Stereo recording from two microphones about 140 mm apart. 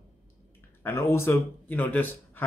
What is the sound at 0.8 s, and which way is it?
Speech, 15° left (ahead or behind).